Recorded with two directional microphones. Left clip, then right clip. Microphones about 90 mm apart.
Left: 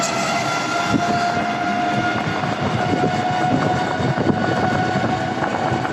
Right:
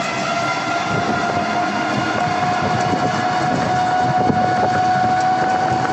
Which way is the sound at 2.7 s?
35° left (ahead or behind).